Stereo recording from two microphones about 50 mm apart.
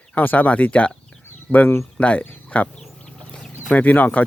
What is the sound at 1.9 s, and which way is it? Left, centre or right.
Speech, left.